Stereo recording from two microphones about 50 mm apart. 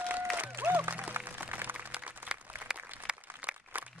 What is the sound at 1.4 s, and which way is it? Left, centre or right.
Music, right.